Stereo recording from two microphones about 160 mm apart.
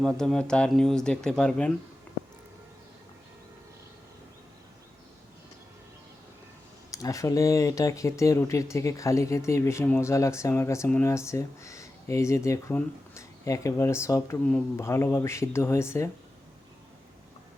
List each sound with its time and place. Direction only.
0.0 s speech: 5° left (ahead or behind)
6.9 s speech: 20° left (ahead or behind)